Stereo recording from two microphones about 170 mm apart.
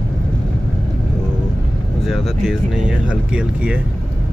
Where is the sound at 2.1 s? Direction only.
5° right (ahead or behind).